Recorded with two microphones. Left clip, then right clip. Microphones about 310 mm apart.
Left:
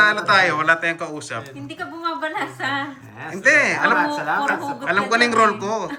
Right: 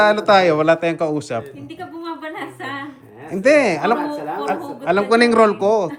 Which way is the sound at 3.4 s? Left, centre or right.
Centre.